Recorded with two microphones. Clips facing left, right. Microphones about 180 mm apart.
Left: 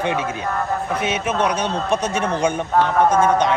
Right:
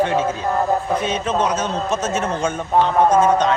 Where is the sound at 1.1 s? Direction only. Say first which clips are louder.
Left 2 dB; 10° left (ahead or behind).